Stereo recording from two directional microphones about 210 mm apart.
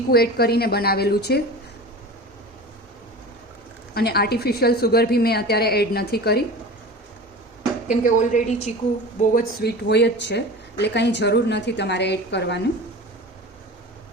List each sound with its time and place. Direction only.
0.1 s a woman's voice: 50° left (ahead or behind)
3.9 s a woman's voice: 50° left (ahead or behind)
7.9 s speech: 35° left (ahead or behind)
9.3 s speech: 45° left (ahead or behind)